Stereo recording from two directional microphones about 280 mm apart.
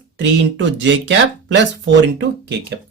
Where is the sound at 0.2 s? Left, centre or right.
Right.